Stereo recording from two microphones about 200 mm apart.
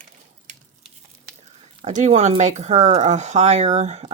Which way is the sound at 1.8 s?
35° right (ahead or behind).